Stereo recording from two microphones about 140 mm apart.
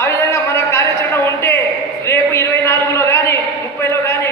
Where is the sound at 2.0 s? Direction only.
20° left (ahead or behind).